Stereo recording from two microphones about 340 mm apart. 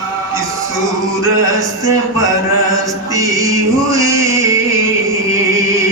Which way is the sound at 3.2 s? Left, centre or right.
Centre.